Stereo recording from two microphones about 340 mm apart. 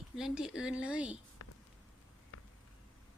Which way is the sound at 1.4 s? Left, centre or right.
Left.